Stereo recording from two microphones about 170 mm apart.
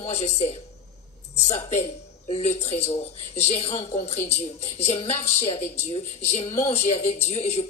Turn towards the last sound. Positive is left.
turn(degrees=40)  # may be behind; listen again after turning